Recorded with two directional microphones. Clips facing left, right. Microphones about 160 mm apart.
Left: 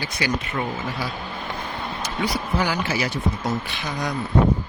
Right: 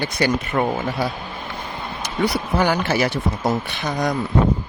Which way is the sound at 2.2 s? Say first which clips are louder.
Right 5 dB; 55° right (ahead or behind).